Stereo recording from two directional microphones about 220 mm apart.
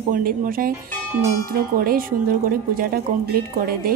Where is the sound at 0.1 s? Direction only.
40° right (ahead or behind).